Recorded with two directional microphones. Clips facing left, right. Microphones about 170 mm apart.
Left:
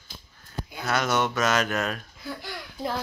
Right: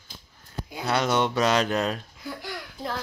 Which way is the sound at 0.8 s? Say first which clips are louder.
Right 1 dB; 25° right (ahead or behind).